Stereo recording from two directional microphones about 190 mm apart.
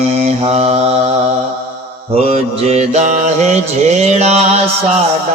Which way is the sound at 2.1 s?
35° right (ahead or behind).